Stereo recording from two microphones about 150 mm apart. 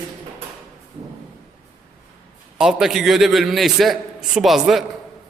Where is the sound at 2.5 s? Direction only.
5° right (ahead or behind).